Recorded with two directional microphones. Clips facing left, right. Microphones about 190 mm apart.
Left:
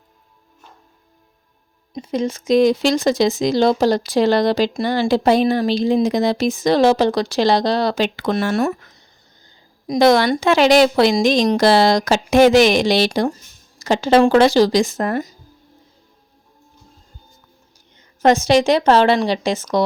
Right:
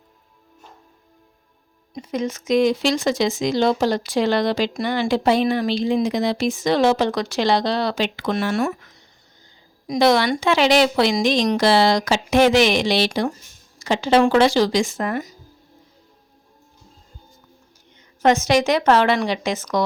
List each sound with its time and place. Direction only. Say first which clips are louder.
1.9 s speech: left 3 dB; 30° left (ahead or behind)
9.8 s a woman's voice: left 3 dB; 40° left (ahead or behind)
18.2 s speech: left 3 dB; 35° left (ahead or behind)